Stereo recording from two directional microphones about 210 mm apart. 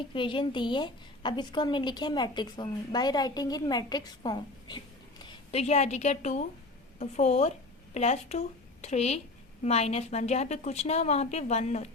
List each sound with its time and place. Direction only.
0.1 s a woman's voice: 25° left (ahead or behind)
5.2 s a woman's voice: 30° left (ahead or behind)